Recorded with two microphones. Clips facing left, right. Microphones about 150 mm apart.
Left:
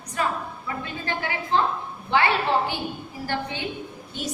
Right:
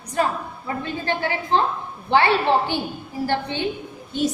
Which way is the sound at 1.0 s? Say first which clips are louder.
Right 5 dB; 30° right (ahead or behind).